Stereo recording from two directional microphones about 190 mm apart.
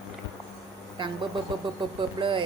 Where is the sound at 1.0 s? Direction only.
25° right (ahead or behind).